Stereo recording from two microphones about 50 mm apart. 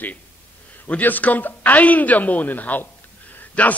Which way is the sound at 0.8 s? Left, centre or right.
Left.